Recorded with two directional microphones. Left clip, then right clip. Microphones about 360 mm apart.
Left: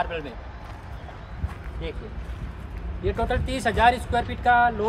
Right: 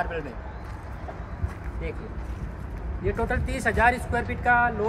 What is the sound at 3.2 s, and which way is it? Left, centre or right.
Speech, left.